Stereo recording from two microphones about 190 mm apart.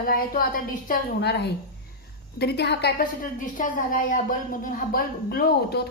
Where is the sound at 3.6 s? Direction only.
45° left (ahead or behind).